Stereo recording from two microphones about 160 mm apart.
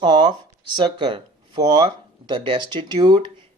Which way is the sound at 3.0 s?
25° right (ahead or behind).